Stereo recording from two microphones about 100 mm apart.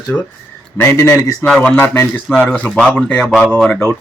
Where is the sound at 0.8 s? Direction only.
25° left (ahead or behind).